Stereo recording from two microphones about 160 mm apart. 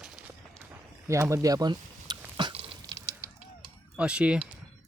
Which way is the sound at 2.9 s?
20° right (ahead or behind).